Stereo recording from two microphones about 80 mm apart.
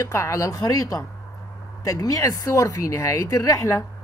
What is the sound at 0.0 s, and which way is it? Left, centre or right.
A woman's voice, left.